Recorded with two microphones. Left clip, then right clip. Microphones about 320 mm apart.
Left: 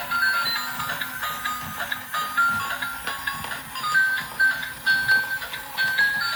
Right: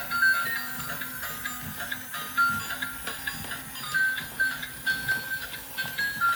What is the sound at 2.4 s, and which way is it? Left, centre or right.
Music, centre.